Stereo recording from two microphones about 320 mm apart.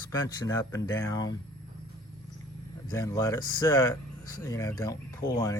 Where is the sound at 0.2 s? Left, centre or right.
Centre.